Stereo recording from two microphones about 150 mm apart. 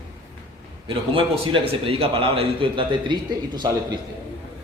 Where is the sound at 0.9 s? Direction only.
35° right (ahead or behind).